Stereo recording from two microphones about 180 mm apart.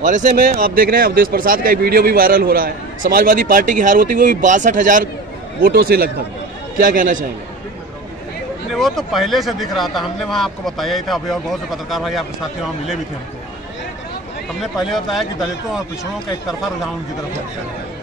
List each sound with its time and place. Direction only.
0.0 s speech: 45° right (ahead or behind)
6.8 s speech: 45° right (ahead or behind)
8.7 s speech: centre (ahead or behind)
14.6 s speech: centre (ahead or behind)